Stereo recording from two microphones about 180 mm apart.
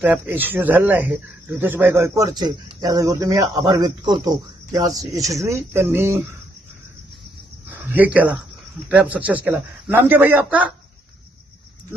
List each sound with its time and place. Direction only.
0.0 s speech: 10° right (ahead or behind)
7.7 s speech: 10° right (ahead or behind)